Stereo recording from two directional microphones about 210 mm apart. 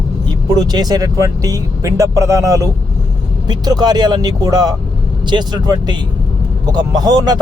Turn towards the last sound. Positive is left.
turn(degrees=-20)  # may be behind; listen again after turning